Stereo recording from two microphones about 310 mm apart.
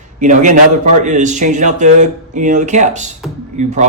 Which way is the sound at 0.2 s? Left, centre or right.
Right.